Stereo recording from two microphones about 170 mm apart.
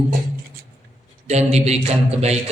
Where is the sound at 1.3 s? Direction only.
40° right (ahead or behind).